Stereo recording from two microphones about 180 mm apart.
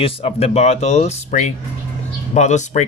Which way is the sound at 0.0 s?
35° left (ahead or behind).